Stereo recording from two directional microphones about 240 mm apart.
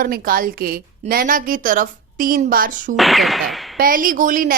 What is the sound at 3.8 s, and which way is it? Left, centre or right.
Speech, right.